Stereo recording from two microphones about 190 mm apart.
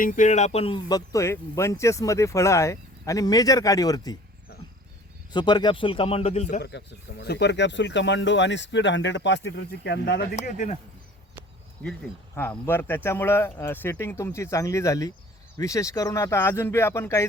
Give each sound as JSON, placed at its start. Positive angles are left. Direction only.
{"t": 0.0, "sound": "speech", "side_deg": 45}
{"t": 5.3, "sound": "a man's voice", "side_deg": 25}
{"t": 6.6, "sound": "speech", "side_deg": 60}
{"t": 10.3, "sound": "speech", "side_deg": 40}
{"t": 11.8, "sound": "speech", "side_deg": 5}